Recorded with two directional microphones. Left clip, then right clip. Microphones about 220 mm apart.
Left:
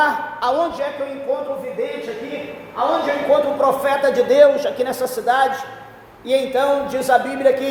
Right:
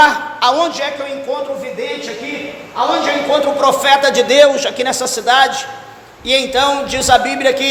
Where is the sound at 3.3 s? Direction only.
30° right (ahead or behind).